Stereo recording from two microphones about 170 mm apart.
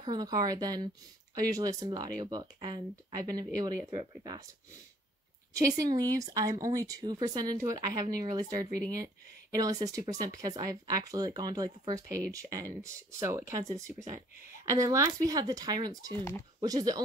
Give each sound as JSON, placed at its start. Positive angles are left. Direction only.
{"t": 0.0, "sound": "speech", "side_deg": -25}
{"t": 5.5, "sound": "speech", "side_deg": -20}